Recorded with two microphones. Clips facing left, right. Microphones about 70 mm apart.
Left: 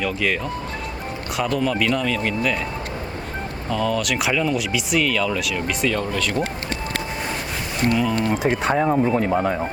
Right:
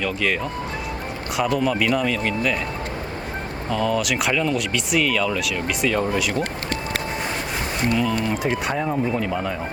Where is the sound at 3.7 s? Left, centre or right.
Centre.